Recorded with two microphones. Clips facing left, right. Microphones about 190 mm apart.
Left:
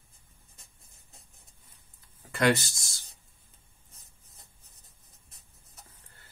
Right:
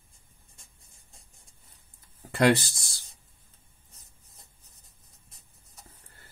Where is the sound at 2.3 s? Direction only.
30° right (ahead or behind).